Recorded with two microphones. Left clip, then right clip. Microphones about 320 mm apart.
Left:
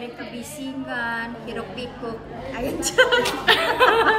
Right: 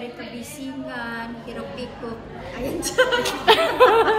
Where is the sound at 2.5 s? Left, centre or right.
Centre.